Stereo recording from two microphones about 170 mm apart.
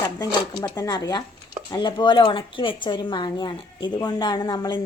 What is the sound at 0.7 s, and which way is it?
A woman's voice, 20° left (ahead or behind).